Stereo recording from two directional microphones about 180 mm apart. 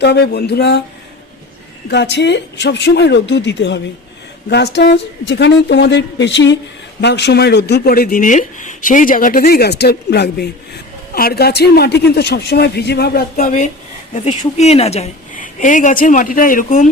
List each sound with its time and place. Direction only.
0.0 s speech: 65° left (ahead or behind)
1.9 s a woman's voice: 70° left (ahead or behind); by 16.9 s 45° left (ahead or behind)